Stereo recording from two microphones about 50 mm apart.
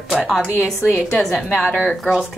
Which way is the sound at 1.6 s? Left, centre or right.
Right.